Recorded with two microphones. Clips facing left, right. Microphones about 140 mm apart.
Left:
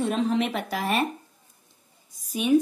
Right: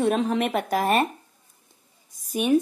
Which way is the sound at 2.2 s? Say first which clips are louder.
Even; 50° right (ahead or behind).